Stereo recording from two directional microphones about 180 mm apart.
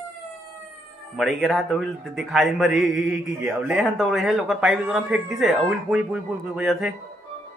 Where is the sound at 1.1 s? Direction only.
Centre (ahead or behind).